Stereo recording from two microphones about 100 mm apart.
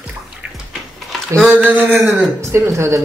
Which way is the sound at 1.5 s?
15° right (ahead or behind).